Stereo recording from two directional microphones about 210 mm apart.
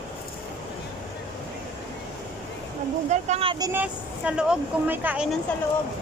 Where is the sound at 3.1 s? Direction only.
30° right (ahead or behind); by 5.3 s 10° right (ahead or behind).